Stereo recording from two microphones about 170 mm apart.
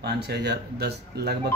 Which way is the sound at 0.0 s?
75° right (ahead or behind).